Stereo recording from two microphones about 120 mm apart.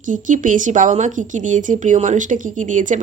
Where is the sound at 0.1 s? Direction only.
90° right.